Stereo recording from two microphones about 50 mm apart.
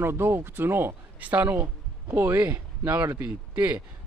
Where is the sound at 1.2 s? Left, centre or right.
Right.